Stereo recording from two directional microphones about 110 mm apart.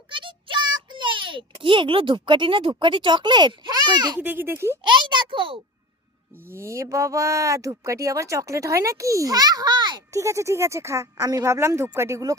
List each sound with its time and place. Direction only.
0.1 s a child's voice: 50° right (ahead or behind)
4.2 s speech: 20° right (ahead or behind)
4.8 s a child's voice: 45° right (ahead or behind)
6.5 s speech: 25° right (ahead or behind); by 10.0 s 40° right (ahead or behind)
10.1 s speech: 25° right (ahead or behind)